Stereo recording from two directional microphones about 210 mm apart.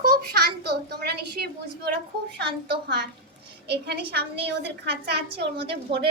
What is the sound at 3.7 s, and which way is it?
A woman's voice, 50° right (ahead or behind).